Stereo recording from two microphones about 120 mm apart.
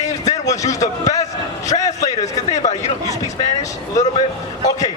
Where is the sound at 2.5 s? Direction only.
70° left (ahead or behind).